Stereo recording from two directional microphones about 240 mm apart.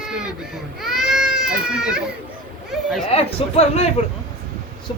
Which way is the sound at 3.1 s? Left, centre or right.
Left.